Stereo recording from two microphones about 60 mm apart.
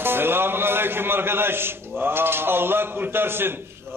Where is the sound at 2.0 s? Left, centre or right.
Right.